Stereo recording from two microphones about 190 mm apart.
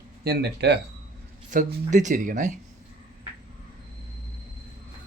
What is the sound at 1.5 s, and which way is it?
Speech, 40° right (ahead or behind).